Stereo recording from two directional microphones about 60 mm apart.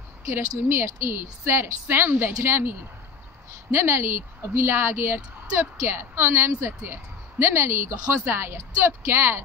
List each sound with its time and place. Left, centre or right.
0.3 s speech: right
3.7 s speech: right